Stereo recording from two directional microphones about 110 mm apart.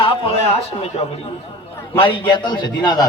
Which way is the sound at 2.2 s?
40° left (ahead or behind).